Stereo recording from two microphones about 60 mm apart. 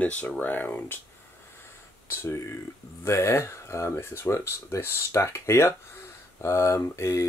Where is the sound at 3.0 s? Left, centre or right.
Left.